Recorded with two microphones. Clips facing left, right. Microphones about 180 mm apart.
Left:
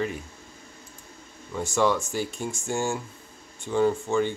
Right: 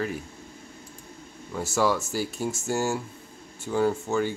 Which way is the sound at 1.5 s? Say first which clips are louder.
Left 1 dB; 5° right (ahead or behind).